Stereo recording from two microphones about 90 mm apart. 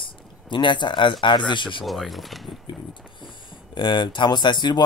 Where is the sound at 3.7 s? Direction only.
60° left (ahead or behind).